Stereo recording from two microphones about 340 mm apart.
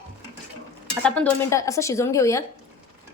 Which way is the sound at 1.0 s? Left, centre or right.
Centre.